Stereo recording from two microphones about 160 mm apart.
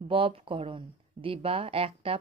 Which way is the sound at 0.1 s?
35° right (ahead or behind).